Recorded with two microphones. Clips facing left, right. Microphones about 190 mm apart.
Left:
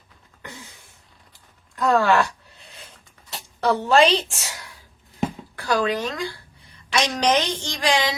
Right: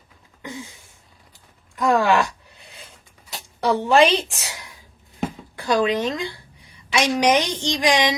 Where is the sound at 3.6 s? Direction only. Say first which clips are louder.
Right 1 dB; 15° right (ahead or behind).